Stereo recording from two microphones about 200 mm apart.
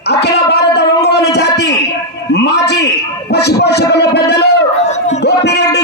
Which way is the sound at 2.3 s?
55° left (ahead or behind).